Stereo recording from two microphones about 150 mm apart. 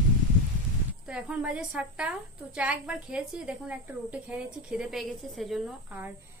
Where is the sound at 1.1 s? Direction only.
5° right (ahead or behind).